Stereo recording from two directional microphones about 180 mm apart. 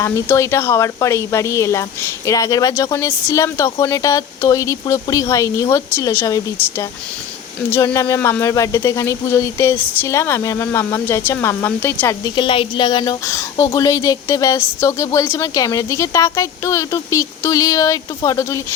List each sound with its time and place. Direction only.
0.0 s speech: 15° left (ahead or behind)
12.4 s speech: 30° left (ahead or behind)